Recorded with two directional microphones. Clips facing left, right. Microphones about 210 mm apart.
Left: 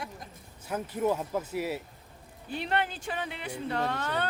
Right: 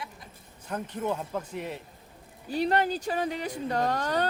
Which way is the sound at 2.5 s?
40° right (ahead or behind).